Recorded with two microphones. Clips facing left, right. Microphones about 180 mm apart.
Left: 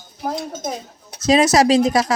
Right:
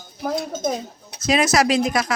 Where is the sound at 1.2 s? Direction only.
35° left (ahead or behind).